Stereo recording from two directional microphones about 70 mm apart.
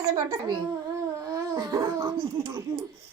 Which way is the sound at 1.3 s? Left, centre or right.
Right.